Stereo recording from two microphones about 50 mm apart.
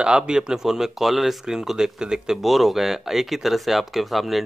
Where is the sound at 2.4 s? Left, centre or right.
Centre.